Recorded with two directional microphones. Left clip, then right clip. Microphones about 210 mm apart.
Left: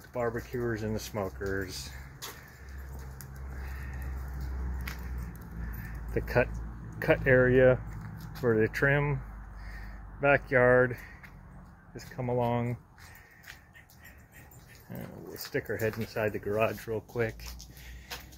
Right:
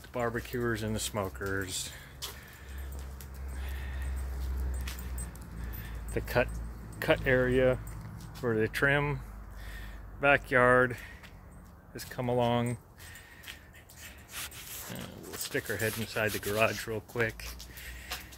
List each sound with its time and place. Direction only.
0.1 s speech: 15° right (ahead or behind)
6.1 s speech: centre (ahead or behind)
8.9 s speech: 15° right (ahead or behind)
10.2 s speech: 10° right (ahead or behind)
12.2 s speech: 30° right (ahead or behind)
14.9 s dog: 5° right (ahead or behind)
15.3 s speech: 5° right (ahead or behind)